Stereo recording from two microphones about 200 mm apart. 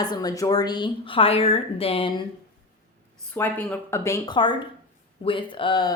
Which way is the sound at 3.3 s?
10° left (ahead or behind).